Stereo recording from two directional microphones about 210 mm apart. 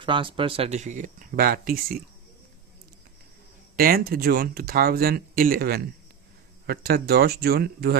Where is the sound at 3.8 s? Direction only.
45° right (ahead or behind).